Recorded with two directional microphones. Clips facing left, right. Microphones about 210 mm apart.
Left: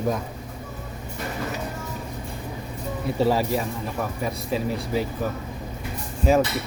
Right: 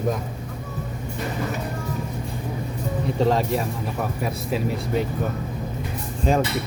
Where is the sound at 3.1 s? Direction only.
5° left (ahead or behind).